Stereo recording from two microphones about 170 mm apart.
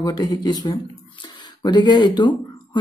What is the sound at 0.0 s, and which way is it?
Speech, 25° left (ahead or behind).